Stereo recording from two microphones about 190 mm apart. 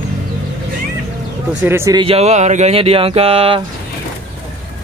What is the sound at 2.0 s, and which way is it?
Speech, 30° right (ahead or behind).